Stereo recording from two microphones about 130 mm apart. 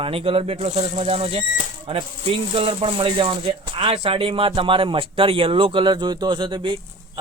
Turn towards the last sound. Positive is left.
turn(degrees=-35)  # may be behind; listen again after turning